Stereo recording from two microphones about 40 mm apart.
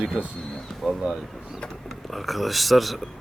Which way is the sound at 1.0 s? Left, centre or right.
Right.